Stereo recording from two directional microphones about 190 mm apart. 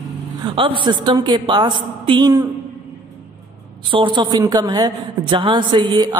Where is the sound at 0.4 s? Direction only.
25° right (ahead or behind).